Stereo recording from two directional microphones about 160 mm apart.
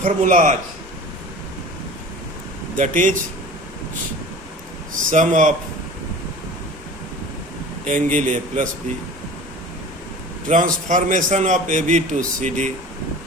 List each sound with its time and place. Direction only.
0.0 s a man's voice: 55° right (ahead or behind)
2.7 s a man's voice: 55° right (ahead or behind)
5.1 s a man's voice: 50° right (ahead or behind)
7.9 s a man's voice: 50° right (ahead or behind)
10.5 s a man's voice: 50° right (ahead or behind)